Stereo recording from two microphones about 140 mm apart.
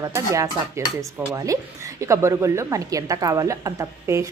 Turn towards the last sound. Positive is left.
turn(degrees=-20)  # may be behind; listen again after turning